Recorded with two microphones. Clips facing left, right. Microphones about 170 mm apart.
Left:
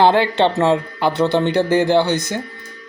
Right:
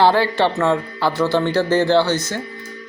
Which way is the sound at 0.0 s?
20° left (ahead or behind).